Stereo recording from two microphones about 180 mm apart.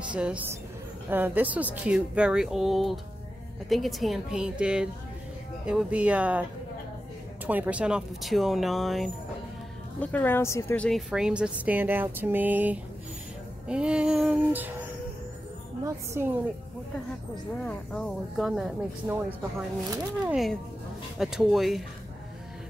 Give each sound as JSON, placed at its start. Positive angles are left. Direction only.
{"t": 0.1, "sound": "a woman's voice", "side_deg": -5}
{"t": 7.4, "sound": "a woman's voice", "side_deg": -10}
{"t": 9.9, "sound": "a woman's voice", "side_deg": 10}
{"t": 15.8, "sound": "speech", "side_deg": -15}
{"t": 17.6, "sound": "a woman's voice", "side_deg": 5}
{"t": 20.2, "sound": "a woman's voice", "side_deg": 0}